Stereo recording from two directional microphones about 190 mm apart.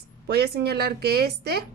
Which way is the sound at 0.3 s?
60° right (ahead or behind).